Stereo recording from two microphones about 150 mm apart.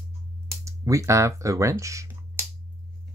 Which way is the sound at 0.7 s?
20° right (ahead or behind).